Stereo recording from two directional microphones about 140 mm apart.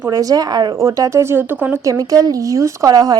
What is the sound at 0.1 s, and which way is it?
Speech, 25° right (ahead or behind).